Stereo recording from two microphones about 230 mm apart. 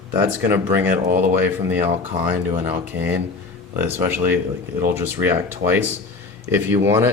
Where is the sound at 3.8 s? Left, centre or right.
Centre.